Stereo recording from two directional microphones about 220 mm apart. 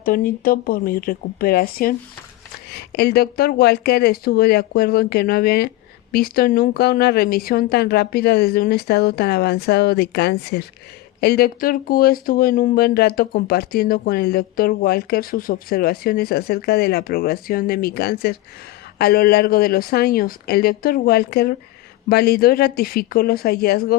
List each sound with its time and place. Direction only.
0.0 s speech: 40° left (ahead or behind)